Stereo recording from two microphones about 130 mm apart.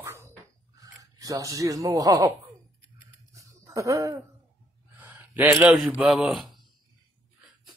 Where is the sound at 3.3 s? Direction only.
25° right (ahead or behind).